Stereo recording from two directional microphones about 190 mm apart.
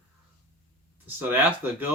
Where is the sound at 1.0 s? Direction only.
10° right (ahead or behind).